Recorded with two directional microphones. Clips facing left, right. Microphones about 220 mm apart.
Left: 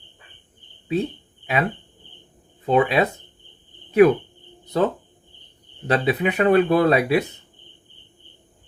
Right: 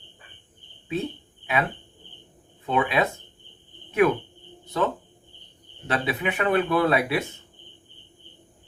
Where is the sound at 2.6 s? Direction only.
35° left (ahead or behind).